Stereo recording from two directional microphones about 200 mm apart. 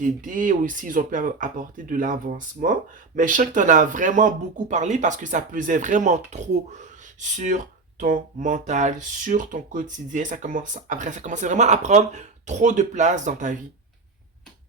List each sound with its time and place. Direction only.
0.0 s speech: 40° right (ahead or behind)